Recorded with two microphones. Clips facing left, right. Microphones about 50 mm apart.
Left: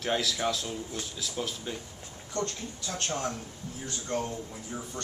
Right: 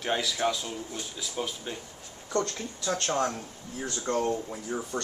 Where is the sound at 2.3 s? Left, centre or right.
Right.